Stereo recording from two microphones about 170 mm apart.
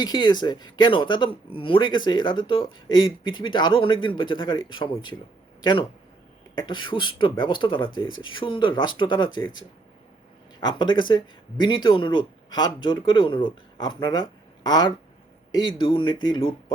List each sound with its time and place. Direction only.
0.0 s speech: 25° left (ahead or behind)
6.6 s speech: 30° left (ahead or behind)